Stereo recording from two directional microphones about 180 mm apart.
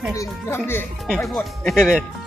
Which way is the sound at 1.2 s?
5° left (ahead or behind).